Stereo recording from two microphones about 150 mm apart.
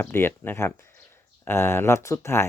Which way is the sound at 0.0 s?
15° left (ahead or behind).